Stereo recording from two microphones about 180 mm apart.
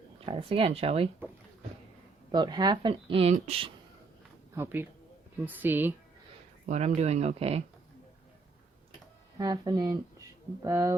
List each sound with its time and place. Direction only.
0.3 s speech: 30° right (ahead or behind)
2.3 s a woman's voice: 25° right (ahead or behind)
4.5 s speech: 15° right (ahead or behind)
6.7 s speech: 40° right (ahead or behind)
9.4 s speech: 20° right (ahead or behind)